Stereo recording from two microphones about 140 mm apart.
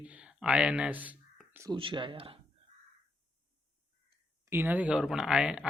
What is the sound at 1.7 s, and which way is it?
Speech, 35° right (ahead or behind).